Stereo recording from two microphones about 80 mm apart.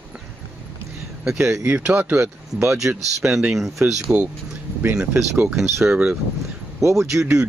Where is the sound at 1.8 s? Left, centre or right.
Centre.